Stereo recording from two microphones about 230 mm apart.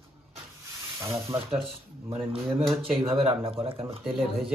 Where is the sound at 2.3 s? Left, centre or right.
Right.